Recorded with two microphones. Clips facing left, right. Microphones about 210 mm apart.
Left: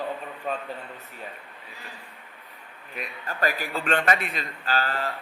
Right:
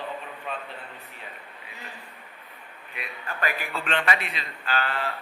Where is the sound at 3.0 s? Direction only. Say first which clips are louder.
Left 3 dB; 40° left (ahead or behind).